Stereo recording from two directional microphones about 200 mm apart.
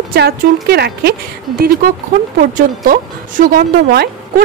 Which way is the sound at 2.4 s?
40° right (ahead or behind).